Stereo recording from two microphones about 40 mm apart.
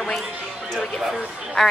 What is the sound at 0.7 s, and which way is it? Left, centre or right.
A woman's voice, centre.